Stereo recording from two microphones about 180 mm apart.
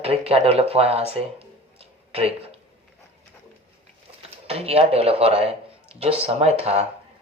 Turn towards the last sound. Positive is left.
turn(degrees=-35)  # may be behind; listen again after turning